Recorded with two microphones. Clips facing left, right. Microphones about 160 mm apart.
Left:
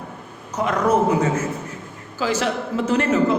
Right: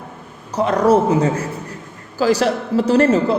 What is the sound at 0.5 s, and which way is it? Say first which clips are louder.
A woman's voice: right 5 dB; 30° right (ahead or behind).